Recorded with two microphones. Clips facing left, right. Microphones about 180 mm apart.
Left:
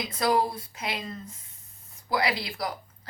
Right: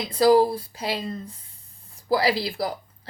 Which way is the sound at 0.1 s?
30° right (ahead or behind).